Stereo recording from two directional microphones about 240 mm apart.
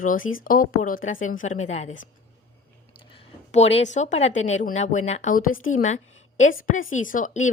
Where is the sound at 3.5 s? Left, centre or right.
Left.